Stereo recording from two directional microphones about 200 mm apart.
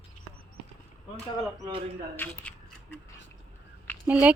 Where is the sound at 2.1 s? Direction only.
10° left (ahead or behind).